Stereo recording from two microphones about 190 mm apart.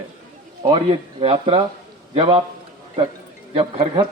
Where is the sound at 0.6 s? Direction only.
25° right (ahead or behind).